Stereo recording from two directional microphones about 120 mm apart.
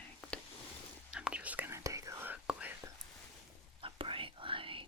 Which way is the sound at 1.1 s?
10° right (ahead or behind).